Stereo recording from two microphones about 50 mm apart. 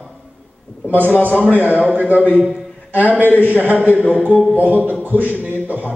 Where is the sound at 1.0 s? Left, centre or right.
Left.